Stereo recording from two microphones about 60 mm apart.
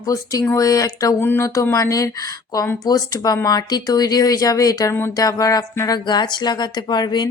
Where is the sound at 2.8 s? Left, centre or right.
Left.